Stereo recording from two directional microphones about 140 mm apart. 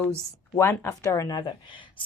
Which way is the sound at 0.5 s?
15° left (ahead or behind).